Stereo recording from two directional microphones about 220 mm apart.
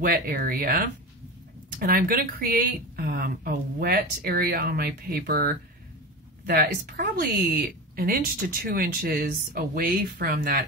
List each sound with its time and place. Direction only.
0.0 s speech: 40° right (ahead or behind)